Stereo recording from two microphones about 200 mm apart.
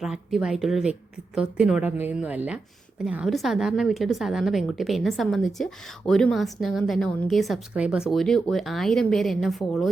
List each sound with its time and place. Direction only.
0.0 s a woman's voice: centre (ahead or behind)